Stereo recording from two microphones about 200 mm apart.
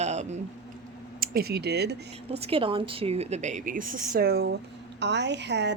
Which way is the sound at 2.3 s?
30° right (ahead or behind).